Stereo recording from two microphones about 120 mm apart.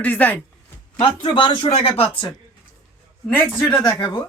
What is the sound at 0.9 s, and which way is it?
Speech, 45° left (ahead or behind).